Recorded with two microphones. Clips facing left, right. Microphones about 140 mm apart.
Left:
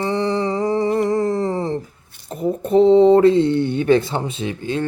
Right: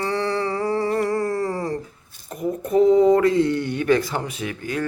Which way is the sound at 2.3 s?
30° left (ahead or behind).